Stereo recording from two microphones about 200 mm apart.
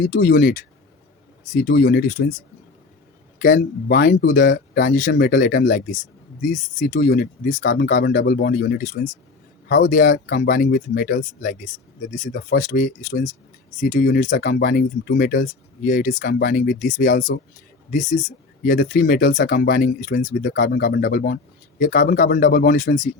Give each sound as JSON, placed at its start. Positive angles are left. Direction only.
{"t": 0.0, "sound": "speech", "side_deg": 40}
{"t": 1.6, "sound": "speech", "side_deg": 45}
{"t": 3.4, "sound": "speech", "side_deg": 40}
{"t": 4.4, "sound": "speech", "side_deg": 65}
{"t": 4.8, "sound": "speech", "side_deg": 40}